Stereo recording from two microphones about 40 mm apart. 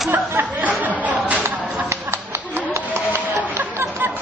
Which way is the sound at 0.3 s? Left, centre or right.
Right.